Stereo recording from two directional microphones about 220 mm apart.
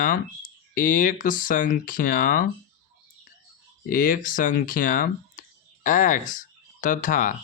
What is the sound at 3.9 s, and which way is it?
Speech, 40° left (ahead or behind).